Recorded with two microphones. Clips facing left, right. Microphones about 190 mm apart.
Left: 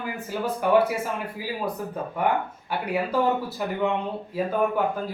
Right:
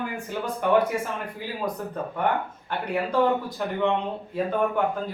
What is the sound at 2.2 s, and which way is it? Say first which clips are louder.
A man's voice: left 1 dB; 5° left (ahead or behind).